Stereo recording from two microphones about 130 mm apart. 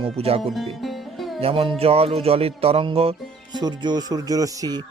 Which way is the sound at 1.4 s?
50° right (ahead or behind).